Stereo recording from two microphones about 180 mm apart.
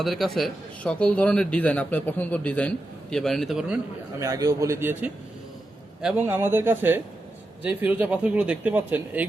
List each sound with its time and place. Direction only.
0.0 s a man's voice: centre (ahead or behind)
4.2 s speech: 20° right (ahead or behind)